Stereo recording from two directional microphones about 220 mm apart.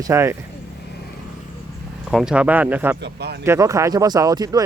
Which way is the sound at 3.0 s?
50° right (ahead or behind).